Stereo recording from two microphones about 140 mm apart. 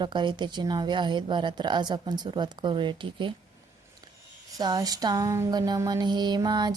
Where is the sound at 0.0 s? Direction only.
35° right (ahead or behind).